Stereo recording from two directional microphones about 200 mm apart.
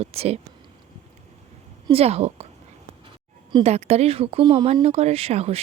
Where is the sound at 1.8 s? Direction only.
30° right (ahead or behind).